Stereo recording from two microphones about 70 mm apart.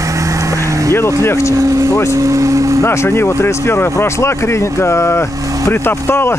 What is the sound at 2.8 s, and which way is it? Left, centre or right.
Speech, left.